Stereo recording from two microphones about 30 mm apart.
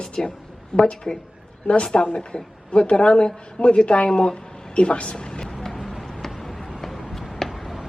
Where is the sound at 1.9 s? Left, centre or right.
Left.